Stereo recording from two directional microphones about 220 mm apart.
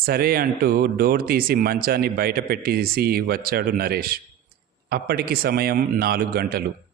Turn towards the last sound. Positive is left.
turn(degrees=-45)  # may be behind; listen again after turning